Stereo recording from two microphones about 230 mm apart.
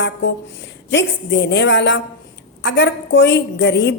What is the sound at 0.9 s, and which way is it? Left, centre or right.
A woman's voice, left.